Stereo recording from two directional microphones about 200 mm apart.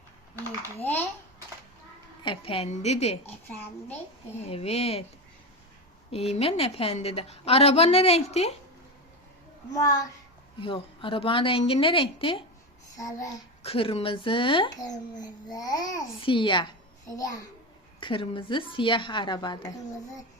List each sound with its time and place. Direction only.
0.8 s child singing: 10° left (ahead or behind)
2.2 s a woman's voice: 25° left (ahead or behind)
4.4 s a woman's voice: 30° left (ahead or behind)
6.1 s a woman's voice: 30° left (ahead or behind)
10.6 s a child's voice: 25° left (ahead or behind)
13.0 s child singing: 15° left (ahead or behind)
13.6 s a child's voice: 30° left (ahead or behind)
18.0 s a child's voice: 25° left (ahead or behind)